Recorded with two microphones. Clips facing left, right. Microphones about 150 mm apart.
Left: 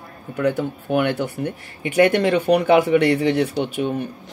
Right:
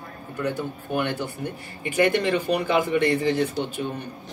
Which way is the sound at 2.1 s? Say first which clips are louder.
Left 6 dB; 60° left (ahead or behind).